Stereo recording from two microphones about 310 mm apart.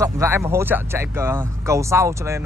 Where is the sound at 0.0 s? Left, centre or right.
Centre.